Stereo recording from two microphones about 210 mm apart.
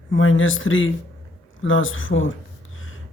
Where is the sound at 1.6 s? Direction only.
70° left (ahead or behind).